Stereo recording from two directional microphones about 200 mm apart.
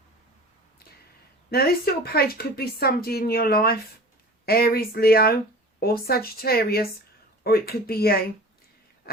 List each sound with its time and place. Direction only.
1.5 s speech: 50° left (ahead or behind)